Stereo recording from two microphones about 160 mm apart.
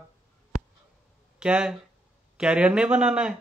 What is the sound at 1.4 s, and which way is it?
Speech, 5° right (ahead or behind).